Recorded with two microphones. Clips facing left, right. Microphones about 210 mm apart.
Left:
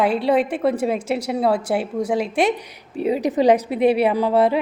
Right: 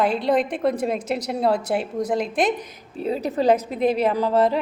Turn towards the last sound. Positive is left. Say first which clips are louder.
# left 2 dB
turn(degrees=10)  # may be behind; listen again after turning